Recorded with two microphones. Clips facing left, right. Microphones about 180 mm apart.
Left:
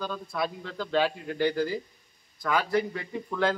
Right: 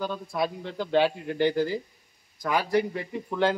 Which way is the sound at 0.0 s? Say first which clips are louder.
Right 3 dB; 20° right (ahead or behind).